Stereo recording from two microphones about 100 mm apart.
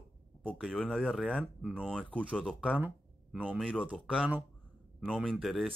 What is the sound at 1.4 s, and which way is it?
Speech, 15° right (ahead or behind).